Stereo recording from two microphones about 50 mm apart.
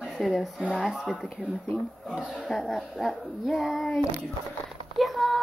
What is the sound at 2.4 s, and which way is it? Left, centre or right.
Speech, centre.